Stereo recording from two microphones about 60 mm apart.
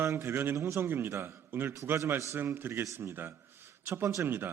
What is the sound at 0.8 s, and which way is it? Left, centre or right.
A man's voice, right.